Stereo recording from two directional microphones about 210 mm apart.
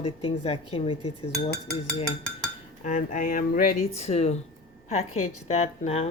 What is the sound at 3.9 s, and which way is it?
Speech, 30° left (ahead or behind).